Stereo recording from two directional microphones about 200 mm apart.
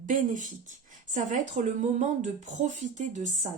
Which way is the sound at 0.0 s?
40° right (ahead or behind).